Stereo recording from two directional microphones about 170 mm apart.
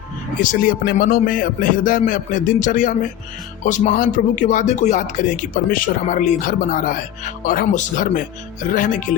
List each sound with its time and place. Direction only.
0.4 s speech: 55° left (ahead or behind)